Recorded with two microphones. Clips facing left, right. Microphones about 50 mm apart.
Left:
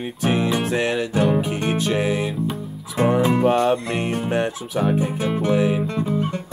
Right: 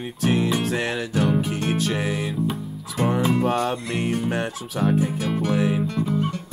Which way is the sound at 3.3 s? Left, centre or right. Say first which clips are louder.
Left 5 dB; left.